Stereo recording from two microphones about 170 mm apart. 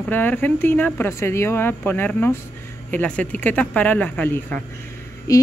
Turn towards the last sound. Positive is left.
turn(degrees=20)  # may be behind; listen again after turning